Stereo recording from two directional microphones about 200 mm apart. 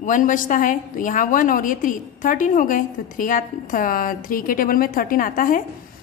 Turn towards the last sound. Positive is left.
turn(degrees=45)  # may be behind; listen again after turning